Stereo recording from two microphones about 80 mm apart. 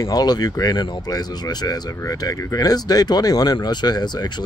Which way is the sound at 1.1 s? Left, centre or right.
Left.